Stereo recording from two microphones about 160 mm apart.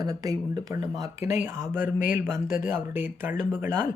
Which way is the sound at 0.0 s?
25° right (ahead or behind).